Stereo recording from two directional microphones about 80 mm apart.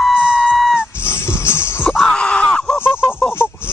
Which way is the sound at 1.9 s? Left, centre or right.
Centre.